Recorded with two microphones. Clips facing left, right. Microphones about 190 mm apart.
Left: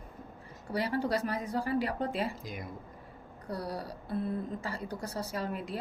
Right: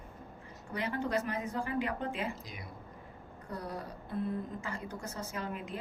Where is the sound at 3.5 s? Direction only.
35° left (ahead or behind).